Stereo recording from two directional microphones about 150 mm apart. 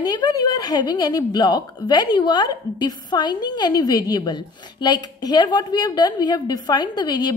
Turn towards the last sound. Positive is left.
turn(degrees=25)  # may be behind; listen again after turning